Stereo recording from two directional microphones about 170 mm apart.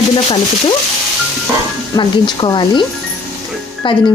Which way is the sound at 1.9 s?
25° left (ahead or behind).